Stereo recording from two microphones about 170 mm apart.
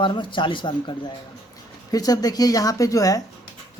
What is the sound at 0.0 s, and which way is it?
Speech, 30° left (ahead or behind).